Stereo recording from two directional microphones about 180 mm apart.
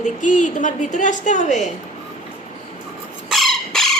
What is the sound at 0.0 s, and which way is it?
A woman's voice, 45° left (ahead or behind).